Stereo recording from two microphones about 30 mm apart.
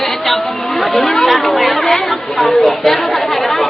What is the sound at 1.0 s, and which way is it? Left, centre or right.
Speech, centre.